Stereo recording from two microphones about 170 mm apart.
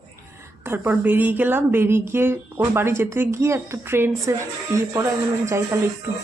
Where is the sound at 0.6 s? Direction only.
15° right (ahead or behind).